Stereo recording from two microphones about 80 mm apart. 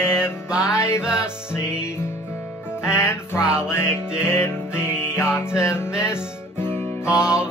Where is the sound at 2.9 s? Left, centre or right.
Left.